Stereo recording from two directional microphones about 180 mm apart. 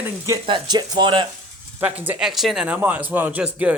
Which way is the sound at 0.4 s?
25° right (ahead or behind).